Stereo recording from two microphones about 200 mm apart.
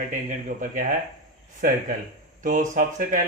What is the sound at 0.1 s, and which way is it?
Speech, 40° right (ahead or behind).